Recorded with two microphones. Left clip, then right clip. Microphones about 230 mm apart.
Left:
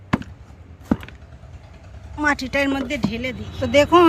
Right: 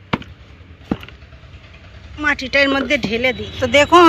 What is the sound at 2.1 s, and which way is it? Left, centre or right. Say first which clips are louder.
Speech: right 4 dB; left.